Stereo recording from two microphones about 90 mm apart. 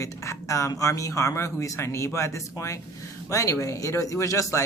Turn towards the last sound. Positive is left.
turn(degrees=35)  # may be behind; listen again after turning